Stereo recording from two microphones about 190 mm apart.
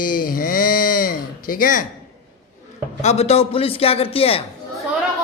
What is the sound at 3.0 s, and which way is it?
A man's voice, 35° left (ahead or behind).